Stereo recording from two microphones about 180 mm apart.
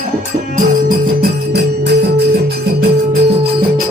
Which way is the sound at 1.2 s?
65° right (ahead or behind).